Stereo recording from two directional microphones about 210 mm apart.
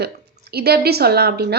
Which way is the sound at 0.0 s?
50° right (ahead or behind).